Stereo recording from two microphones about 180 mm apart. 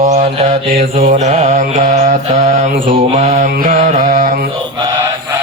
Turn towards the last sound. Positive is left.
turn(degrees=-45)  # may be behind; listen again after turning